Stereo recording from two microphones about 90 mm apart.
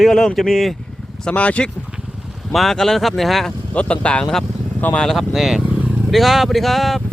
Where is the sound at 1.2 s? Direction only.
15° left (ahead or behind).